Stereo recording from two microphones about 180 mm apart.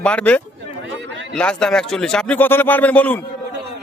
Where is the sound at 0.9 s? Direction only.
90° right.